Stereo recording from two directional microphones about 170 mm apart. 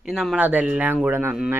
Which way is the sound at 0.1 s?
5° right (ahead or behind).